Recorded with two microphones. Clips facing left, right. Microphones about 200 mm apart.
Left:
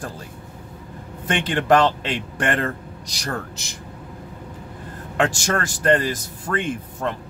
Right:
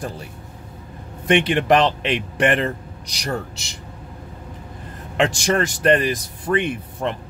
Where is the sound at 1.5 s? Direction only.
15° right (ahead or behind).